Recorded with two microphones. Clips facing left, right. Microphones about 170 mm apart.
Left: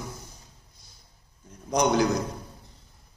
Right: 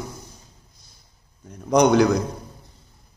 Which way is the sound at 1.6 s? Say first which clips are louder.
Right 7 dB; 65° right (ahead or behind).